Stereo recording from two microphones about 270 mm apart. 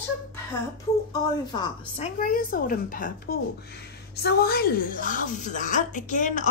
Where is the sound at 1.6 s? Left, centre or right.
Left.